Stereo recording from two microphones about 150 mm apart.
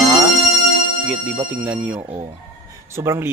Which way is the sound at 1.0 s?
10° right (ahead or behind).